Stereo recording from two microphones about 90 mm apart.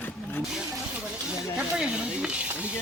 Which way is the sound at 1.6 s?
10° right (ahead or behind).